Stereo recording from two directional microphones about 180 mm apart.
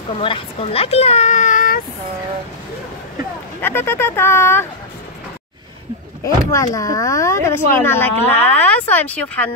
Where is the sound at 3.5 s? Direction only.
10° left (ahead or behind).